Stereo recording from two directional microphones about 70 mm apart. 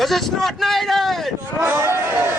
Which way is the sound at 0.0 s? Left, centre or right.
Centre.